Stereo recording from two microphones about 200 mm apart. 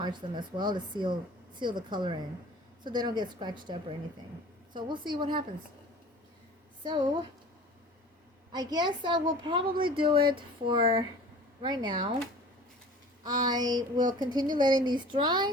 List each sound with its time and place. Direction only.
0.0 s a woman's voice: 20° right (ahead or behind)
6.8 s a woman's voice: 20° right (ahead or behind)
8.5 s a woman's voice: 20° right (ahead or behind)
13.2 s a woman's voice: 20° right (ahead or behind)